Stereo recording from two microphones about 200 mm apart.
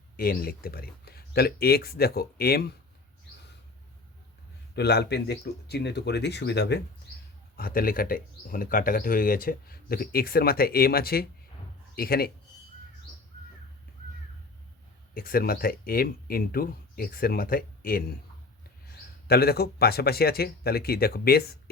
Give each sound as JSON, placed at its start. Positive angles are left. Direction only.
{"t": 0.2, "sound": "speech", "side_deg": 50}
{"t": 4.7, "sound": "speech", "side_deg": 55}
{"t": 7.5, "sound": "speech", "side_deg": 45}
{"t": 15.1, "sound": "speech", "side_deg": 45}
{"t": 19.3, "sound": "speech", "side_deg": 50}